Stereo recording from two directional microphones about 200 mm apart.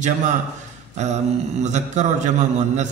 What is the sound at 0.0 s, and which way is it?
A man's voice, 35° right (ahead or behind).